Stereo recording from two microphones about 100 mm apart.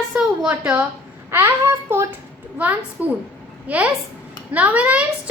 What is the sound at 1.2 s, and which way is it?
A child's voice, 25° right (ahead or behind).